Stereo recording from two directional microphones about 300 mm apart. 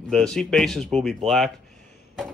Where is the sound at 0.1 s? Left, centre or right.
Centre.